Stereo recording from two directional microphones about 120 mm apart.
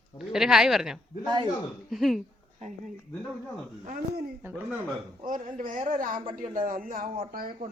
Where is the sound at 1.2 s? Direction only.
35° right (ahead or behind).